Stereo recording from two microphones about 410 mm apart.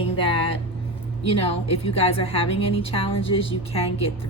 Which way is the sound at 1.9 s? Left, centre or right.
Centre.